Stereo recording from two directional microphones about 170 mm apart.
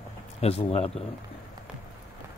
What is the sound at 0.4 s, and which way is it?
Speech, 35° left (ahead or behind).